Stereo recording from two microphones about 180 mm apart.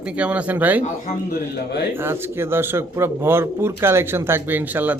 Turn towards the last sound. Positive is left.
turn(degrees=-10)  # may be behind; listen again after turning